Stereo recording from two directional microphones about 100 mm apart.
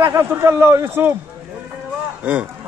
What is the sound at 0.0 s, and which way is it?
Speech, 25° right (ahead or behind).